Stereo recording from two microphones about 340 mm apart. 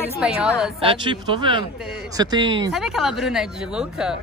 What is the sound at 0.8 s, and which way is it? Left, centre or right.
Speech, centre.